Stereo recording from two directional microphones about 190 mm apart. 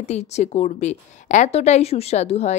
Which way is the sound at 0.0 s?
35° left (ahead or behind).